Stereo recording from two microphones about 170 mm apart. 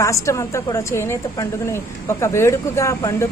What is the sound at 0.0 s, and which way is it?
A woman's voice, 15° left (ahead or behind).